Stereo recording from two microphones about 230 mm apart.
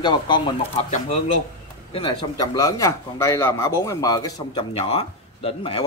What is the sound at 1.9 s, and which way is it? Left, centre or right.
A man's voice, left.